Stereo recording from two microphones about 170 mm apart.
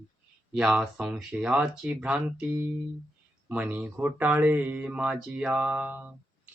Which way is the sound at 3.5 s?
10° right (ahead or behind).